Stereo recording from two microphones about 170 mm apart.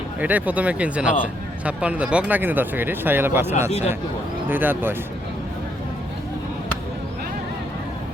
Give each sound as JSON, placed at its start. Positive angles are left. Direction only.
{"t": 0.2, "sound": "speech", "side_deg": -10}
{"t": 3.7, "sound": "speech", "side_deg": 40}
{"t": 4.4, "sound": "speech", "side_deg": -10}